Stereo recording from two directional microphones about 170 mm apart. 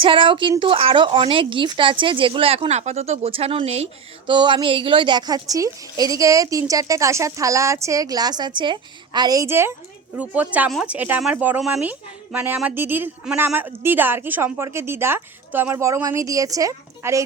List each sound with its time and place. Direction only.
0.0 s a woman's voice: 30° right (ahead or behind)